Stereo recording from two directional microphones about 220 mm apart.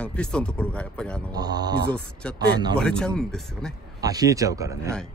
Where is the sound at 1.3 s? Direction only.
20° right (ahead or behind).